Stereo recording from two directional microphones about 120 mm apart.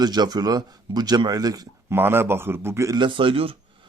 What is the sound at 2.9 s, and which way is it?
Speech, 45° right (ahead or behind).